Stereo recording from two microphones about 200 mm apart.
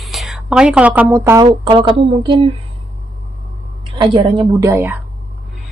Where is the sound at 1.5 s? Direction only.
25° right (ahead or behind).